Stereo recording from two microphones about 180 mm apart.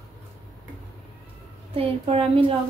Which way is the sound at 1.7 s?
30° right (ahead or behind).